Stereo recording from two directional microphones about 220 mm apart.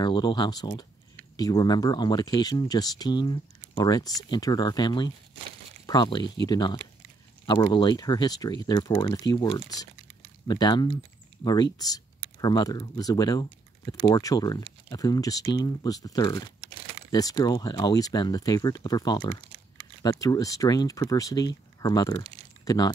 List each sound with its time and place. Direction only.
0.0 s speech: 20° left (ahead or behind)